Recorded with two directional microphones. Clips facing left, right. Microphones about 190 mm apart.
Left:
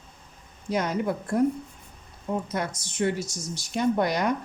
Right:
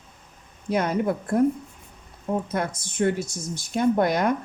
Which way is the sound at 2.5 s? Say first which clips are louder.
Right 3 dB; 50° right (ahead or behind).